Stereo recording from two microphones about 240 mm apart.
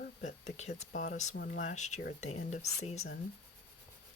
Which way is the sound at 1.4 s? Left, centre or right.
Left.